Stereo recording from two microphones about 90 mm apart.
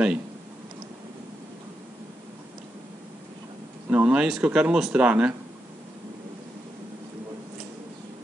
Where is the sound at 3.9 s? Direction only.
15° right (ahead or behind).